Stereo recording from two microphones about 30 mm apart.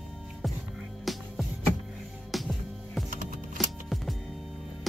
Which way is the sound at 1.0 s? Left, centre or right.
Centre.